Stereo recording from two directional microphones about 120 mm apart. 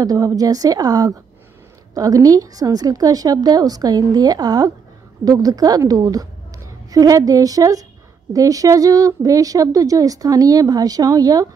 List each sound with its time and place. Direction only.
0.0 s a woman's voice: 30° right (ahead or behind)